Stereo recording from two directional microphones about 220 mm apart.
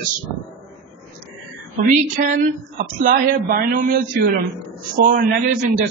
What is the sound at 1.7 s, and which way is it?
A woman's voice, 35° right (ahead or behind).